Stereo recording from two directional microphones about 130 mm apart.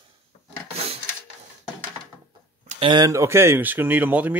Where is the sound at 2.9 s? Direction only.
25° right (ahead or behind).